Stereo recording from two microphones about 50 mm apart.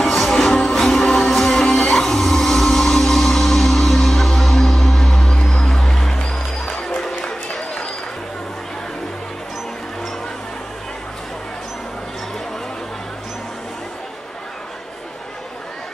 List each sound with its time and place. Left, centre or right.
0.0 s music: centre
5.3 s music: centre
7.2 s a sound: centre